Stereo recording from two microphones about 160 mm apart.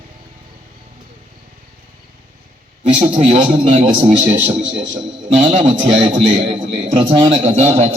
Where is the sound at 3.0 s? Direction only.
45° right (ahead or behind).